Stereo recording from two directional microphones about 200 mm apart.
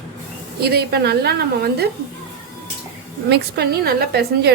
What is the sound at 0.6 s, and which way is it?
A woman's voice, 50° right (ahead or behind).